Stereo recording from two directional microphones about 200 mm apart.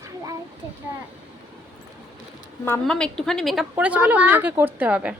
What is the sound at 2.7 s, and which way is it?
A woman's voice, 5° left (ahead or behind).